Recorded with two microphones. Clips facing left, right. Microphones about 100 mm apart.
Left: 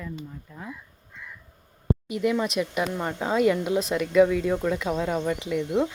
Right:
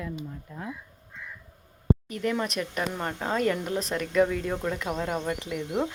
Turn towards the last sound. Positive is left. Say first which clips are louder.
# left 4 dB
turn(degrees=0)  # may be behind; listen again after turning